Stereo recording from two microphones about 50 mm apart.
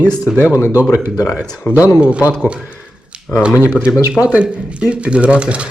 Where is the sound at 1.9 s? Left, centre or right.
Right.